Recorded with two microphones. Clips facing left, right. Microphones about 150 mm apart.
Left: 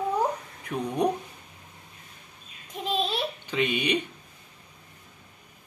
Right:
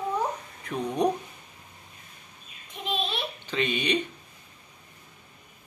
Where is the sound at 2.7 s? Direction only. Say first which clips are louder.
Left 3 dB; 40° left (ahead or behind).